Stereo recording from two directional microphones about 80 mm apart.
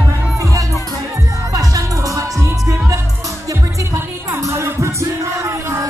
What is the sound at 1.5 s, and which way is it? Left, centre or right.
Music, right.